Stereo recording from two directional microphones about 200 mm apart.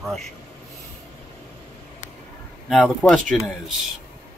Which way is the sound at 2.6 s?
5° right (ahead or behind).